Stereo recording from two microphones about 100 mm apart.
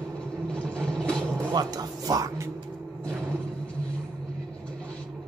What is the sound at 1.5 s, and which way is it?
Speech, 40° right (ahead or behind).